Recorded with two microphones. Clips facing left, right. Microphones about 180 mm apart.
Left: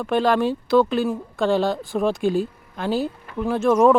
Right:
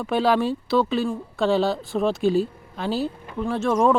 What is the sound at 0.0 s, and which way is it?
Speech, centre (ahead or behind).